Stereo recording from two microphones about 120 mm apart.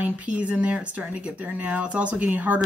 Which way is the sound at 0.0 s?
10° right (ahead or behind).